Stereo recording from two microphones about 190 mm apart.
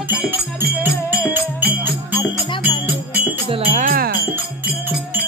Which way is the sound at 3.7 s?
50° right (ahead or behind).